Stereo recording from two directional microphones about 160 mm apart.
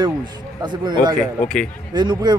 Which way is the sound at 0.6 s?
25° right (ahead or behind).